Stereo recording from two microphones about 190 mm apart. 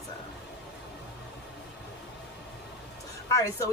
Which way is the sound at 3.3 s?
15° left (ahead or behind).